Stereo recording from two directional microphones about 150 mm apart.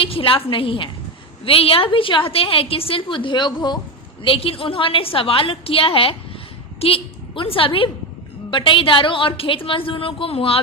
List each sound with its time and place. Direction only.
0.0 s a woman's voice: 35° left (ahead or behind)